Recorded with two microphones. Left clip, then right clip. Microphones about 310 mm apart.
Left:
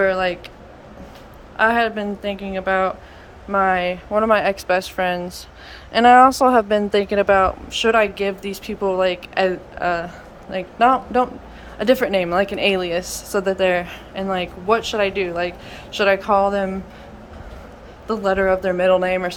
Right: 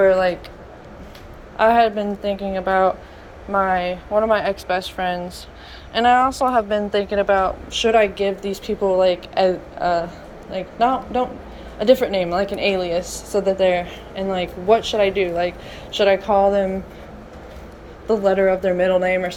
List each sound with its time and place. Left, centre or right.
0.0 s a sound: centre
1.5 s a woman's voice: centre
18.1 s a woman's voice: centre